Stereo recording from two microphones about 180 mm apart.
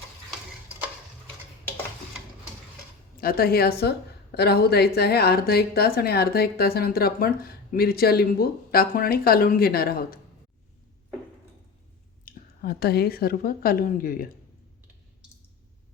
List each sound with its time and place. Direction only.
3.2 s speech: 55° left (ahead or behind)
12.2 s a woman's voice: 60° left (ahead or behind)